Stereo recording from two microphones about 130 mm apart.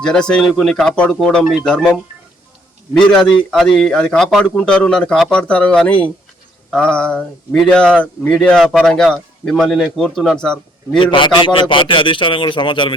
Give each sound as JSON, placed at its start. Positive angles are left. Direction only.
{"t": 0.0, "sound": "a man's voice", "side_deg": 5}
{"t": 2.9, "sound": "a man's voice", "side_deg": 5}
{"t": 10.9, "sound": "a man's voice", "side_deg": 40}